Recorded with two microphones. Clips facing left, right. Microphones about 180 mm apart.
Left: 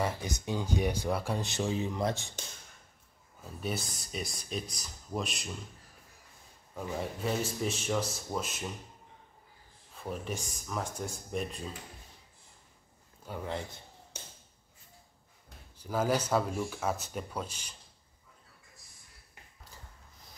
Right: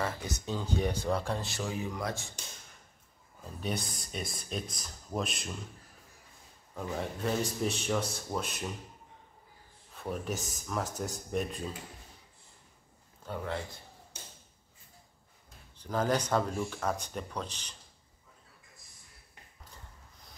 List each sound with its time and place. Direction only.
0.0 s speech: 15° left (ahead or behind)
1.5 s speech: 25° left (ahead or behind)
3.4 s speech: 5° left (ahead or behind)
6.7 s speech: 5° left (ahead or behind)
9.9 s speech: centre (ahead or behind)
13.2 s a man's voice: 10° left (ahead or behind)
15.8 s speech: 10° left (ahead or behind)